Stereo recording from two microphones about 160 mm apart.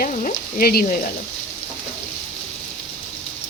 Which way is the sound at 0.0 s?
55° left (ahead or behind).